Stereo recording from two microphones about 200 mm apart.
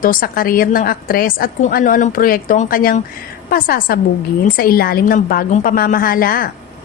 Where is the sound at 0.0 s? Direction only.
45° left (ahead or behind).